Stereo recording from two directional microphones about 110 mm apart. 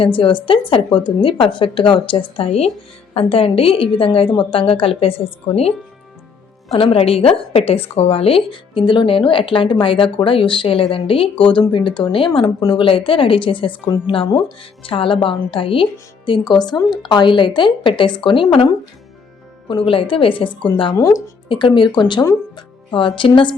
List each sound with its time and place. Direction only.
0.0 s a woman's voice: 50° left (ahead or behind); by 2.7 s 70° left (ahead or behind)
3.2 s a woman's voice: 55° left (ahead or behind)
6.7 s a woman's voice: 60° left (ahead or behind)